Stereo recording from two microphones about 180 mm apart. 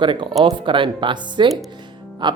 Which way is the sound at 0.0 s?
25° right (ahead or behind).